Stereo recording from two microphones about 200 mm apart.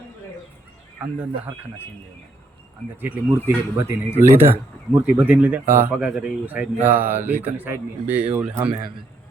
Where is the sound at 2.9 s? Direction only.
10° right (ahead or behind).